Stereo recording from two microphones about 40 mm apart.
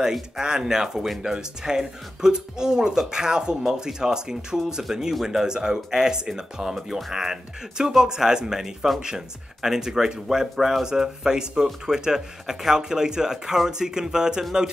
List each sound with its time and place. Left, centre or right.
0.4 s speech: centre